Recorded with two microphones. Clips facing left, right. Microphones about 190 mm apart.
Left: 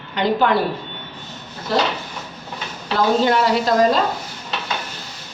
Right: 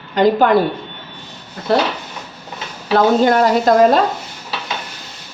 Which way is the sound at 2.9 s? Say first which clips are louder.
Right 4 dB; 50° right (ahead or behind).